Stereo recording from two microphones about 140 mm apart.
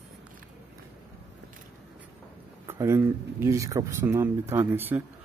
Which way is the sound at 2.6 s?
20° right (ahead or behind).